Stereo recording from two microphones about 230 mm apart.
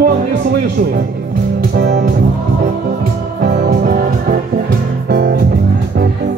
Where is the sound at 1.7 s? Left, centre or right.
Right.